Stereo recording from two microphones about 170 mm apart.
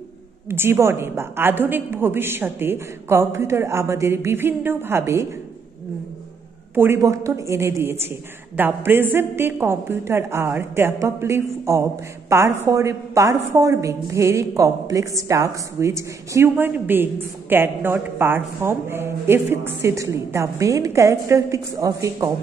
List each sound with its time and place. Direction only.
0.5 s a woman's voice: 15° right (ahead or behind)
6.7 s a woman's voice: 15° right (ahead or behind)